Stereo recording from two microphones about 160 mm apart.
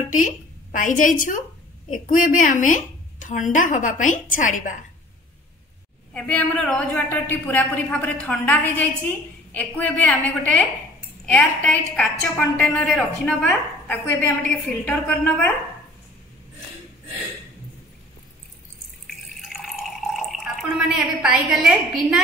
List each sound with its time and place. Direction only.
0.1 s a woman's voice: 55° left (ahead or behind)
6.1 s a woman's voice: 10° left (ahead or behind)
19.0 s water: centre (ahead or behind)